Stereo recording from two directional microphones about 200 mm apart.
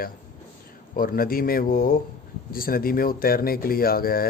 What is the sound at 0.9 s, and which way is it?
Speech, 45° left (ahead or behind).